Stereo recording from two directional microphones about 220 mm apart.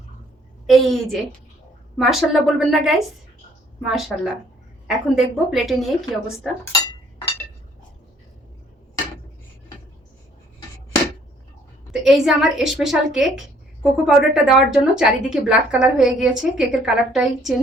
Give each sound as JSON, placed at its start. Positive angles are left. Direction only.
{"t": 0.7, "sound": "a woman's voice", "side_deg": 0}
{"t": 11.9, "sound": "a woman's voice", "side_deg": 0}